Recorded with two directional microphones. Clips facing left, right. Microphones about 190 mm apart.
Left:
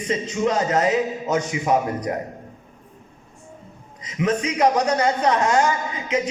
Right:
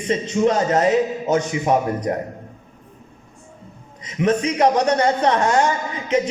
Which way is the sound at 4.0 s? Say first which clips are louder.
Right 3 dB; 30° right (ahead or behind).